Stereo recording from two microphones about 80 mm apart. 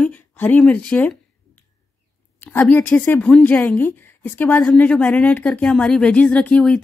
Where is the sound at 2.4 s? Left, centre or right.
Left.